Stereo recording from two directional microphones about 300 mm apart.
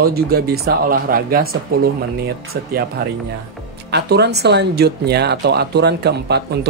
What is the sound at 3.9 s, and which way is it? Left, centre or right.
Speech, right.